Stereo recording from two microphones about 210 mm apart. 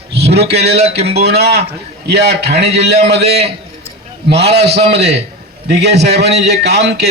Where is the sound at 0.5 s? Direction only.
50° right (ahead or behind).